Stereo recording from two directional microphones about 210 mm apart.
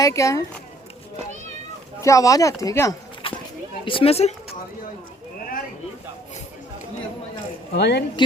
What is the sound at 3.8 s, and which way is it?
Speech, 25° left (ahead or behind).